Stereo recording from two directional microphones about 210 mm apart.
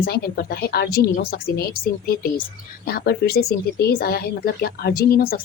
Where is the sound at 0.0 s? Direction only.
50° left (ahead or behind).